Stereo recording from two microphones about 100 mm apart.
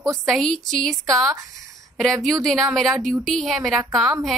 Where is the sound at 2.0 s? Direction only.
Centre (ahead or behind).